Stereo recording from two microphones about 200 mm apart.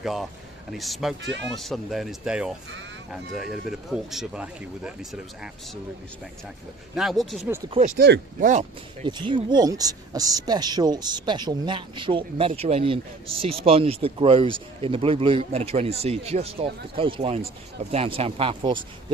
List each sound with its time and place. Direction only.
0.0 s speech: centre (ahead or behind)
1.2 s speech: 65° right (ahead or behind)
1.5 s speech: centre (ahead or behind)
6.9 s speech: centre (ahead or behind)
7.7 s speech: 35° right (ahead or behind)
7.9 s speech: 55° right (ahead or behind)
8.4 s speech: 40° right (ahead or behind)
9.0 s speech: 25° right (ahead or behind)